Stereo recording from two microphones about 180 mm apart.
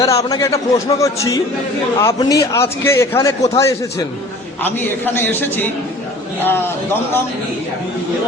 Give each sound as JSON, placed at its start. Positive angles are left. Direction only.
{"t": 0.0, "sound": "a man's voice", "side_deg": 20}